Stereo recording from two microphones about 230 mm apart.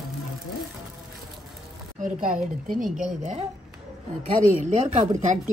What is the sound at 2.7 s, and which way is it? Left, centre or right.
Speech, right.